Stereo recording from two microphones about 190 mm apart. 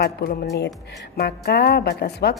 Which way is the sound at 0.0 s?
55° left (ahead or behind).